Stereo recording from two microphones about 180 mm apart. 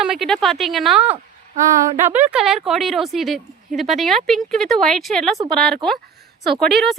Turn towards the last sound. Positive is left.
turn(degrees=0)  # may be behind; listen again after turning